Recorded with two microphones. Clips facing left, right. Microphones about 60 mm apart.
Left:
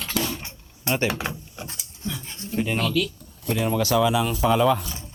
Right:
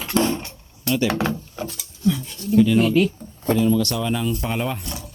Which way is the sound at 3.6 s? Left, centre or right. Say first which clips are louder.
Left 3 dB; left.